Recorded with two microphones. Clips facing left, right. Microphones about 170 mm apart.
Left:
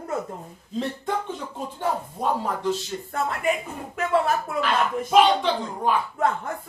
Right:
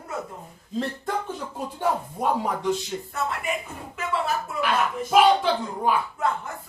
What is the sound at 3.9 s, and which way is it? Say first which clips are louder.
Speech: left 5 dB; 50° left (ahead or behind).